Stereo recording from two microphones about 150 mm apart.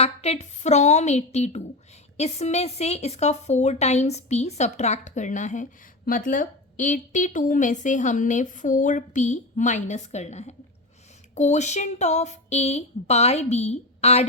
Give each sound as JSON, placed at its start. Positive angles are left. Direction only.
{"t": 0.0, "sound": "speech", "side_deg": 45}
{"t": 6.1, "sound": "a woman's voice", "side_deg": 65}